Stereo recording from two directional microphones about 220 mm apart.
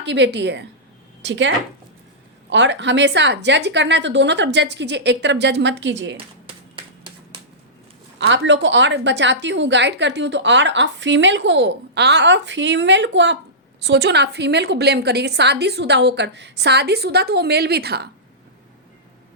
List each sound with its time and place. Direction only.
0.0 s a woman's voice: 55° right (ahead or behind)
6.1 s a sound: 25° right (ahead or behind)
8.2 s a woman's voice: 55° right (ahead or behind)